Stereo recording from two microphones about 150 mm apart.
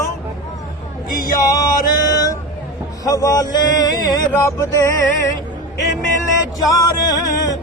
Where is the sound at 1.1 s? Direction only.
70° left (ahead or behind).